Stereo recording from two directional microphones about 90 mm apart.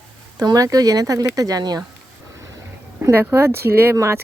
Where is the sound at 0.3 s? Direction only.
45° right (ahead or behind).